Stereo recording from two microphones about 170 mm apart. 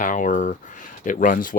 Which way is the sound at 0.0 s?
50° left (ahead or behind).